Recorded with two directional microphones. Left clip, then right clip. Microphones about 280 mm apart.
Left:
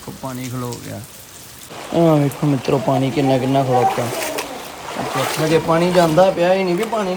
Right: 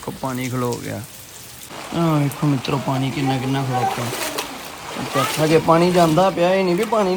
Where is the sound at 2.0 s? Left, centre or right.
Right.